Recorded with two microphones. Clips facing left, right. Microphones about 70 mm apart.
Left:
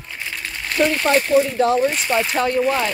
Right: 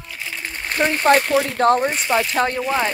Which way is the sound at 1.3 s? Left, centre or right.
Right.